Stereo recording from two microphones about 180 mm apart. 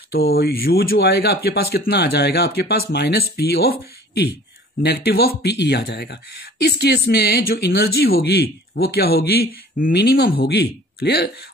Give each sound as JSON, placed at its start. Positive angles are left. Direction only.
{"t": 0.1, "sound": "speech", "side_deg": 55}
{"t": 4.8, "sound": "speech", "side_deg": 65}